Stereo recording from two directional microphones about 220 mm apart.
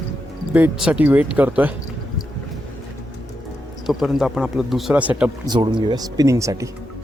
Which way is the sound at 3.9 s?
Centre (ahead or behind).